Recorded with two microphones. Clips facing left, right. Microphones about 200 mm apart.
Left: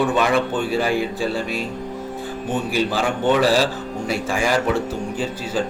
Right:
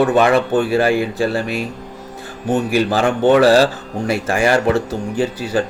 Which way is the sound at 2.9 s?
70° right (ahead or behind).